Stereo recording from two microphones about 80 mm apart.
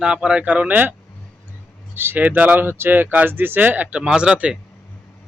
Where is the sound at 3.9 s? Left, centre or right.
Centre.